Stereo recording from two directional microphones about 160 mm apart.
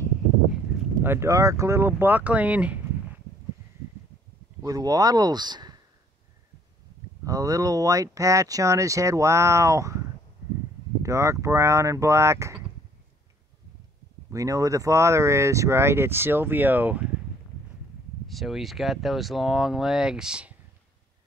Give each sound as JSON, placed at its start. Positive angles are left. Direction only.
{"t": 1.0, "sound": "speech", "side_deg": -15}
{"t": 4.6, "sound": "speech", "side_deg": -25}
{"t": 7.2, "sound": "speech", "side_deg": -20}
{"t": 14.3, "sound": "speech", "side_deg": -20}
{"t": 18.2, "sound": "speech", "side_deg": 0}